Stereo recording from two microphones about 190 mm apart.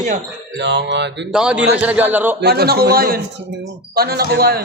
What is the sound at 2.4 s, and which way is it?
A man's voice, 55° right (ahead or behind).